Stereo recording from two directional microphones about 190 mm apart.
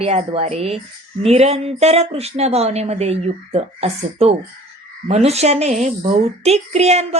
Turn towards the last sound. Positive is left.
turn(degrees=-35)  # may be behind; listen again after turning